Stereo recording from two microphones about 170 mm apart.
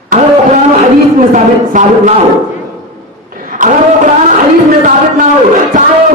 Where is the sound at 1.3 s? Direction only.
45° right (ahead or behind).